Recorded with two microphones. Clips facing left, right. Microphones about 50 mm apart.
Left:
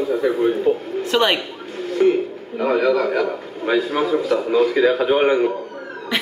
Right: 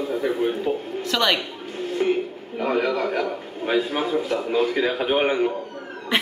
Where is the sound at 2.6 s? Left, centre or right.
Left.